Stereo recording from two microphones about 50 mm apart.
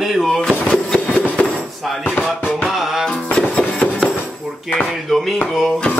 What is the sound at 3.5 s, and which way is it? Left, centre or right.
Music, centre.